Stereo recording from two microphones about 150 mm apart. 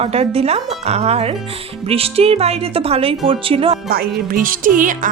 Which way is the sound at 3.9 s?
75° right (ahead or behind).